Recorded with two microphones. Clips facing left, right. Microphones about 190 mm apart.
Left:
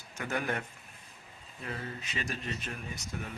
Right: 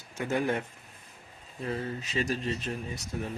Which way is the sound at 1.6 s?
35° right (ahead or behind).